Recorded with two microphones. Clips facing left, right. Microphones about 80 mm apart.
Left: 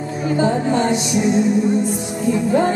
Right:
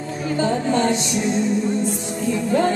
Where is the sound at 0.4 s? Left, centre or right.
Centre.